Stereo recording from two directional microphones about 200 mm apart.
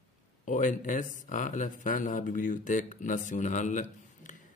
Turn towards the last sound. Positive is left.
turn(degrees=40)  # may be behind; listen again after turning